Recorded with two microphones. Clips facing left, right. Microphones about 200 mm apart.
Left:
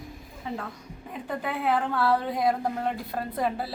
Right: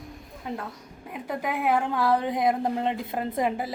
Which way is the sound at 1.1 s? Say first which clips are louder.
Right 2 dB; 10° right (ahead or behind).